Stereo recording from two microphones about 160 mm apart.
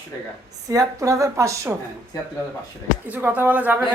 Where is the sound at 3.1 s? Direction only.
10° right (ahead or behind).